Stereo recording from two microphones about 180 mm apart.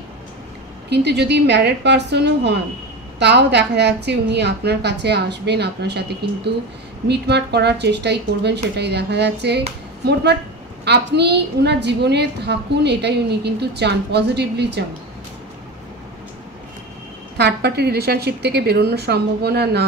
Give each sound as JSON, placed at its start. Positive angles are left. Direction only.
{"t": 0.8, "sound": "a woman's voice", "side_deg": -70}
{"t": 10.9, "sound": "a woman's voice", "side_deg": -70}
{"t": 17.4, "sound": "a woman's voice", "side_deg": -65}